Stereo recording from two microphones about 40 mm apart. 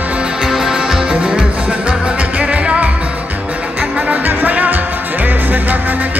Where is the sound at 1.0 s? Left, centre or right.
Right.